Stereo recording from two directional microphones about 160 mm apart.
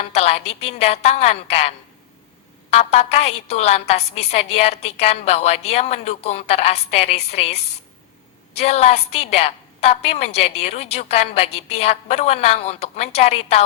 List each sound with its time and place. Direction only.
0.0 s a woman's voice: 40° left (ahead or behind)